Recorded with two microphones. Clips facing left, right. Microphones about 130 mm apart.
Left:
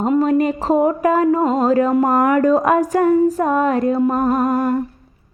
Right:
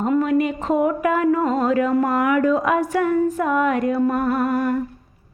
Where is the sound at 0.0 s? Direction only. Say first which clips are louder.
Left 3 dB; 30° left (ahead or behind).